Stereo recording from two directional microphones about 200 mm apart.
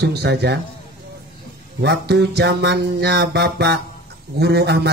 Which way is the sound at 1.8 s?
55° right (ahead or behind).